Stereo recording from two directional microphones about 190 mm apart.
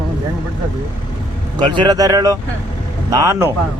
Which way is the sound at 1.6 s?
25° right (ahead or behind).